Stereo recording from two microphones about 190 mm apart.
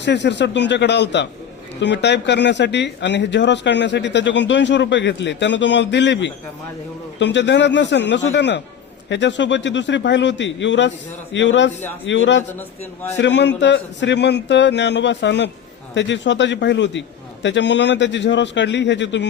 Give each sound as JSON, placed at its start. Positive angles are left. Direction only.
{"t": 0.0, "sound": "speech", "side_deg": 65}
{"t": 12.5, "sound": "speech", "side_deg": 10}
{"t": 13.1, "sound": "speech", "side_deg": 65}